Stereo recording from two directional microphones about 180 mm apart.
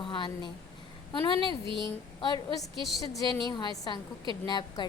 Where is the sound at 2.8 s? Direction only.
Centre (ahead or behind).